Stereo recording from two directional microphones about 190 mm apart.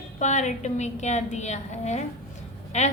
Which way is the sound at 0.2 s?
40° left (ahead or behind).